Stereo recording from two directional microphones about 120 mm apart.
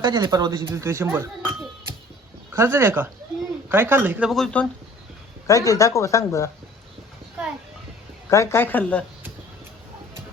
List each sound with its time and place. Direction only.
0.0 s speech: 35° right (ahead or behind); by 4.3 s 15° right (ahead or behind)
4.3 s speech: 5° left (ahead or behind)
5.5 s speech: 25° left (ahead or behind)
8.3 s speech: 25° left (ahead or behind)